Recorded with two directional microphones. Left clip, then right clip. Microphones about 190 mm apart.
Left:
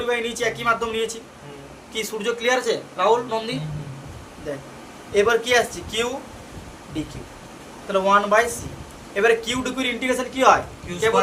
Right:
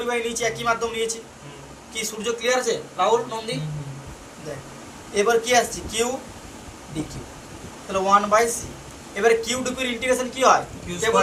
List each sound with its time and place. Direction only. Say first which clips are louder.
0.1 s a man's voice: left 1 dB; 55° left (ahead or behind)
5.1 s a man's voice: left 1 dB; 50° left (ahead or behind)
7.9 s a man's voice: left 1 dB; 55° left (ahead or behind)